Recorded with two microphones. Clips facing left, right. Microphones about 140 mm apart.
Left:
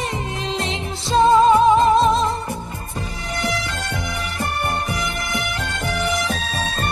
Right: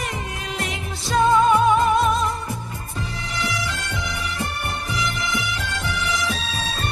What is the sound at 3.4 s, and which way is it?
Music, 50° left (ahead or behind).